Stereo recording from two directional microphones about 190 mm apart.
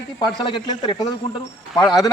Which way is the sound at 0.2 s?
25° left (ahead or behind).